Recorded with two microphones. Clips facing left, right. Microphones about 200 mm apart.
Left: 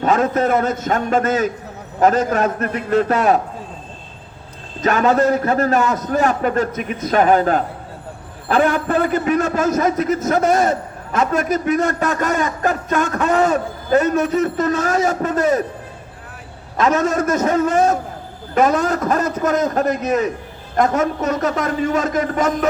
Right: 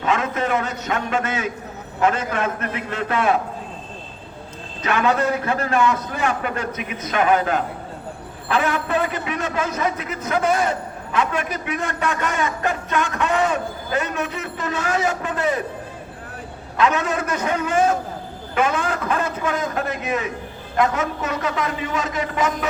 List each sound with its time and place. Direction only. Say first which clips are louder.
0.0 s a man's voice: left 6 dB; 40° left (ahead or behind)
4.8 s a man's voice: left 5 dB; 40° left (ahead or behind)
16.7 s a man's voice: left 4 dB; 40° left (ahead or behind)